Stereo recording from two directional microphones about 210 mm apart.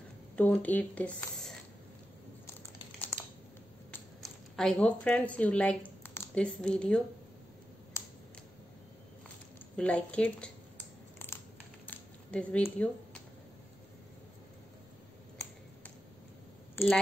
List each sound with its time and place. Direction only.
0.4 s speech: 5° left (ahead or behind)
4.2 s speech: 5° left (ahead or behind)
9.8 s speech: 5° left (ahead or behind)
11.8 s a sound: 5° left (ahead or behind)
16.7 s speech: 10° left (ahead or behind)